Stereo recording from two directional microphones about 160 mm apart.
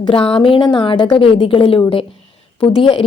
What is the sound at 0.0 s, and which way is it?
A woman's voice, 35° left (ahead or behind).